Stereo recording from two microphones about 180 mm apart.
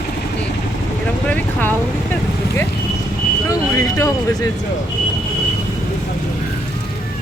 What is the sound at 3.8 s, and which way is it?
Speech, 20° left (ahead or behind).